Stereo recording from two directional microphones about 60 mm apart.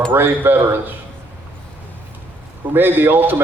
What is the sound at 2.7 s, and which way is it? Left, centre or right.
Speech, right.